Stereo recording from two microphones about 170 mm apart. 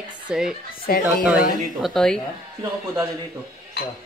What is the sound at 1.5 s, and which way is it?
Speech, centre (ahead or behind).